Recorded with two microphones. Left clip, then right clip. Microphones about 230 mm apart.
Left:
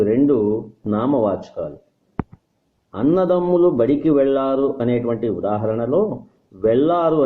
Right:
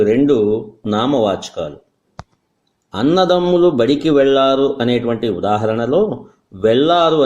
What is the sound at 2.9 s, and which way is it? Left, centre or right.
Speech, right.